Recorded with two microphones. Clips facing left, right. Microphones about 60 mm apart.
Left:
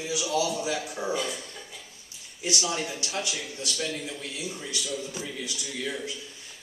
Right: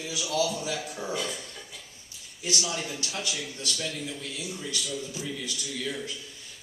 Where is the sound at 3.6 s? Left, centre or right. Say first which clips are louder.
Left 2 dB; centre.